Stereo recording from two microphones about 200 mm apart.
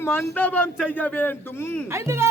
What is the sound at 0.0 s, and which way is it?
A man's voice, 10° left (ahead or behind).